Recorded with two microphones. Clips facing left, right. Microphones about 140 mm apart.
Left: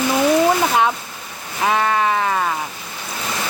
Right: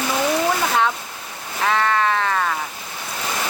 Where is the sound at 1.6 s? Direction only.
15° left (ahead or behind).